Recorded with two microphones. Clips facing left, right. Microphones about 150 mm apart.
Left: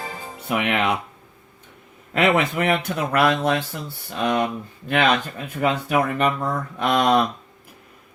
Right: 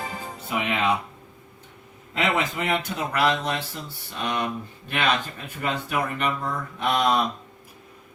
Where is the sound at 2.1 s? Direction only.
60° left (ahead or behind).